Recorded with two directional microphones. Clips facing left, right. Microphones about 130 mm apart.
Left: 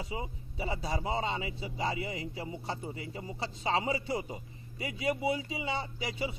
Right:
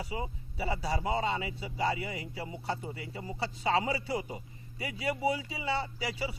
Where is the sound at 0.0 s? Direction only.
25° left (ahead or behind).